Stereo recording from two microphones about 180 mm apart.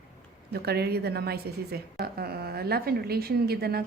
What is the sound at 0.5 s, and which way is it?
Speech, 60° right (ahead or behind).